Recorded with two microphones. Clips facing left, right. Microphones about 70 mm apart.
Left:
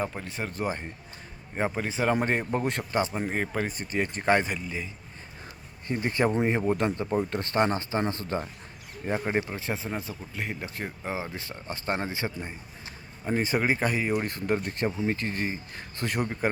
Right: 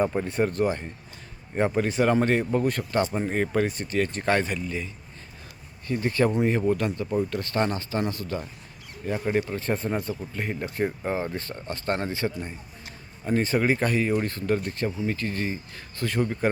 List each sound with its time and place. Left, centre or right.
0.0 s speech: centre
1.5 s speech: centre; by 3.0 s left
3.0 s speech: centre
4.1 s speech: centre
5.9 s speech: left
9.6 s speech: centre